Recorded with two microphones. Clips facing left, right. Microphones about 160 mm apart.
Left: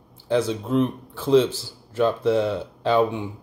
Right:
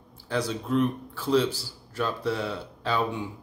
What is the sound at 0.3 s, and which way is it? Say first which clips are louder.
Speech: left 5 dB; 20° left (ahead or behind).